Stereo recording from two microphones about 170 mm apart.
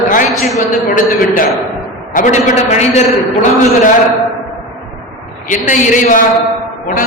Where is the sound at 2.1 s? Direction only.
45° left (ahead or behind).